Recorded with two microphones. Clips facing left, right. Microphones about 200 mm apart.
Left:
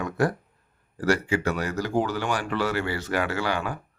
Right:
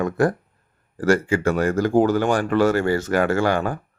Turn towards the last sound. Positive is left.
turn(degrees=-50)  # may be behind; listen again after turning